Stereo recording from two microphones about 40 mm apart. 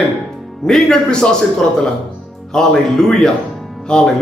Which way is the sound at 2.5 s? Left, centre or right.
Centre.